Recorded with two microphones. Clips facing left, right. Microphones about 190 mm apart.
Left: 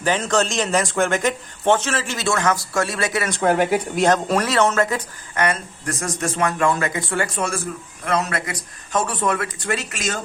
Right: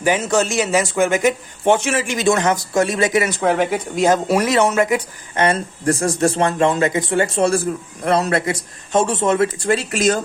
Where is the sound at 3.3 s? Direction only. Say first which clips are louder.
Even; centre (ahead or behind).